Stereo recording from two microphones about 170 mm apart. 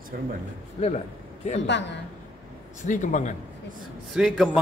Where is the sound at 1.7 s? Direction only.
90° left.